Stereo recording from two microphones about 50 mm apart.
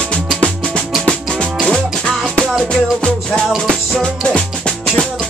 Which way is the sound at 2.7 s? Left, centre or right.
Centre.